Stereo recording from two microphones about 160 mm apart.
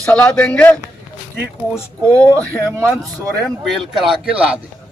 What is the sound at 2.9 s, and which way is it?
Speech, centre (ahead or behind).